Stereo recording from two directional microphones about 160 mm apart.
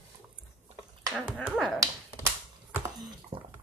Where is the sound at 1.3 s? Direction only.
5° right (ahead or behind).